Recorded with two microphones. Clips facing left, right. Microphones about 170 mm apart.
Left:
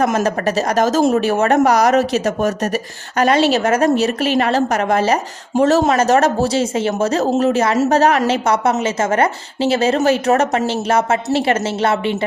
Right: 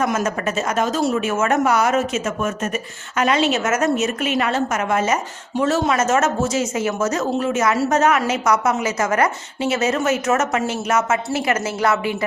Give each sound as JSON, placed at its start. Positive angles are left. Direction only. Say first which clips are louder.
{"t": 0.0, "sound": "a woman's voice", "louder": "left 4 dB", "side_deg": 35}